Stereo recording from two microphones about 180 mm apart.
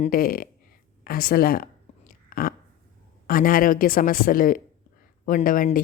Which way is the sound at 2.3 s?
50° left (ahead or behind).